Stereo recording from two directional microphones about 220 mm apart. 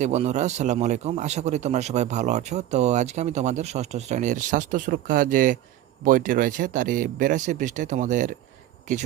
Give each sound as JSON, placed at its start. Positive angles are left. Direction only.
{"t": 0.0, "sound": "a man's voice", "side_deg": -30}